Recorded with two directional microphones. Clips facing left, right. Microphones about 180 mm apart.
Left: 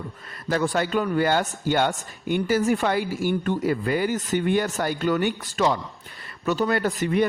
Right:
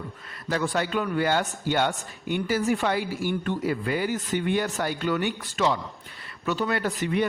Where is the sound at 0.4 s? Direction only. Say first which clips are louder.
Left 3 dB; 45° left (ahead or behind).